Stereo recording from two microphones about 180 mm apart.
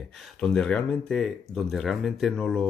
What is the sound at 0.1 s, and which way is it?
Speech, centre (ahead or behind).